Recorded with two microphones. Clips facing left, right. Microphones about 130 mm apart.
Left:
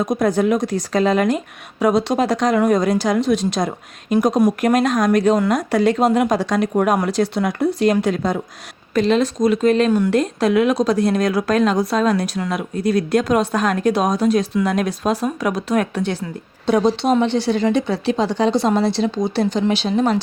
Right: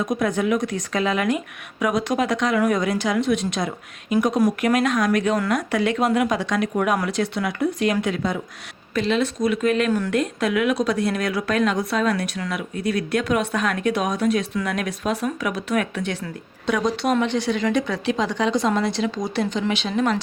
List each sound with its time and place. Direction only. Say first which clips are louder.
0.0 s speech: left 5 dB; 40° left (ahead or behind)